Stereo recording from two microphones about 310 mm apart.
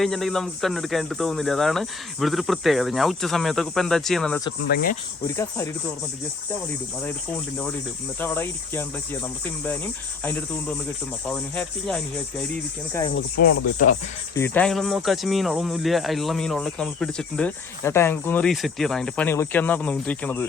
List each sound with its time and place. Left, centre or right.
0.0 s speech: centre
4.7 s speech: left
5.2 s speech: centre
8.2 s speech: centre
11.3 s speech: centre
13.4 s speech: left
14.3 s speech: centre